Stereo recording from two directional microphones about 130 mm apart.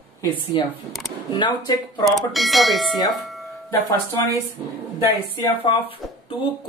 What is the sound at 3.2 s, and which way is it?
Music, centre (ahead or behind).